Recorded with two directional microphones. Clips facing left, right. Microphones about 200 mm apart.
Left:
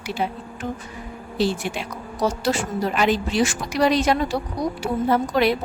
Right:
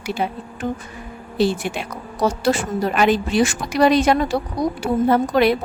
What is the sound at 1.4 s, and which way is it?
A woman's voice, 55° right (ahead or behind).